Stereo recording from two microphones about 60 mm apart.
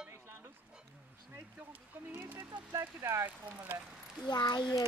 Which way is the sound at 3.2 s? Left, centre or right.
Right.